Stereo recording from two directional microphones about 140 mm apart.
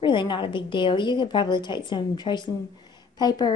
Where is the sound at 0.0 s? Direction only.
35° left (ahead or behind).